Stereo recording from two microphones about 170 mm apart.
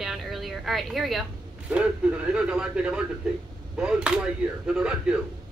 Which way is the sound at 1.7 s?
5° right (ahead or behind).